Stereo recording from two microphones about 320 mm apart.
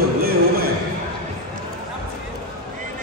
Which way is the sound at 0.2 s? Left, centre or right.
Right.